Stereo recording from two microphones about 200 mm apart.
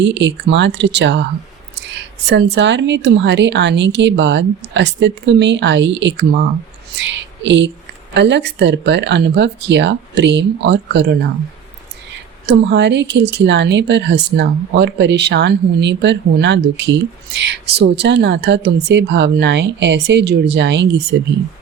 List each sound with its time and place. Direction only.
0.0 s speech: 65° right (ahead or behind)
12.5 s speech: 60° right (ahead or behind)